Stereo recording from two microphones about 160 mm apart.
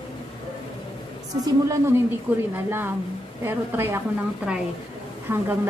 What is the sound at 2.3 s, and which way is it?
A woman's voice, 10° right (ahead or behind).